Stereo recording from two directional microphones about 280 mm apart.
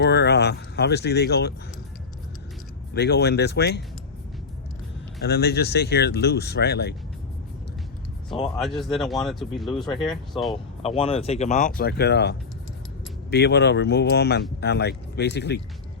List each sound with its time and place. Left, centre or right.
0.0 s speech: left
2.9 s speech: left
5.2 s speech: left
8.6 s speech: centre
10.5 s speech: centre; by 15.6 s left